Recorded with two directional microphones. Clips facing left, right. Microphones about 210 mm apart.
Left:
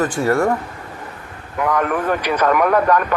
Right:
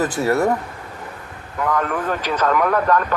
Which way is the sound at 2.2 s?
15° left (ahead or behind).